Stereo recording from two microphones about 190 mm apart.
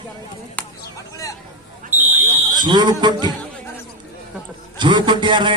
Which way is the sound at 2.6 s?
25° right (ahead or behind).